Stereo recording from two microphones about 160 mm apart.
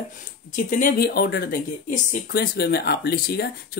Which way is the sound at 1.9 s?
60° left (ahead or behind).